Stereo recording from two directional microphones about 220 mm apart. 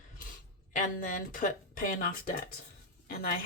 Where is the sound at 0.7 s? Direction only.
35° left (ahead or behind).